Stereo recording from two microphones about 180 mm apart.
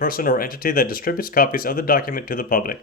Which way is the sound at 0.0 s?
50° left (ahead or behind).